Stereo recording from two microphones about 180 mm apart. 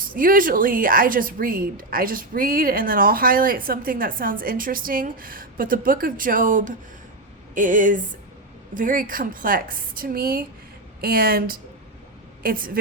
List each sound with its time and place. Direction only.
0.1 s a woman's voice: 50° right (ahead or behind)